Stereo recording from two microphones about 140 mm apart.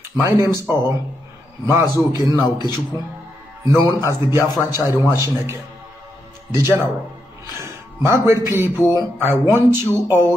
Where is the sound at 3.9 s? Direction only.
25° left (ahead or behind).